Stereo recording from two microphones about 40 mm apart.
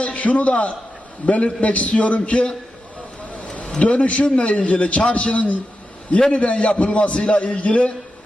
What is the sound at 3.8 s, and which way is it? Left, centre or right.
A man's voice, left.